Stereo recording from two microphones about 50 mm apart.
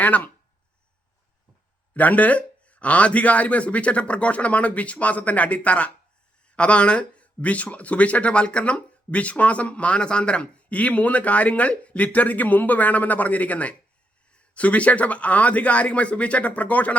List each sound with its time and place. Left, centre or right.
0.0 s speech: left
1.9 s speech: left